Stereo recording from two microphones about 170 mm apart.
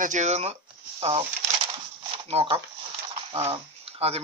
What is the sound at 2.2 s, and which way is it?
Speech, 35° right (ahead or behind).